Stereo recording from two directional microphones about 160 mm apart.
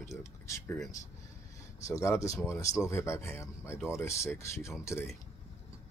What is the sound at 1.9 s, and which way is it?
Speech, 20° left (ahead or behind).